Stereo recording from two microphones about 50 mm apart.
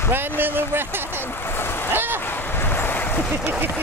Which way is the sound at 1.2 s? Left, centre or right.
Left.